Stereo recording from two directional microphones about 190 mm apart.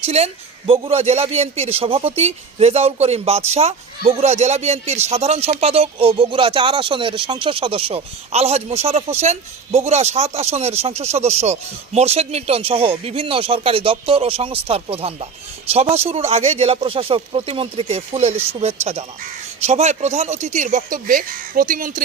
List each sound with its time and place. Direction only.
0.0 s a woman's voice: 35° right (ahead or behind)
19.6 s a man's voice: 35° right (ahead or behind)